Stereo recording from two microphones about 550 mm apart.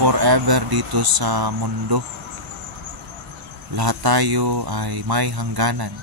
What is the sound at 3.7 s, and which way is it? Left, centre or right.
Speech, right.